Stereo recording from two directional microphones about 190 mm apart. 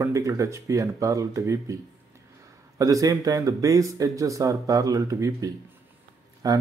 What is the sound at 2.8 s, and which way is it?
Speech, 15° right (ahead or behind).